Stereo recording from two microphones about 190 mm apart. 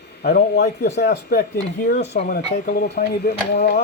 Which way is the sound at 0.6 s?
35° left (ahead or behind).